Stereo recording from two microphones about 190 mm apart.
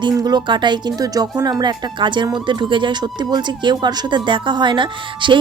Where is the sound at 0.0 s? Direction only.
20° right (ahead or behind).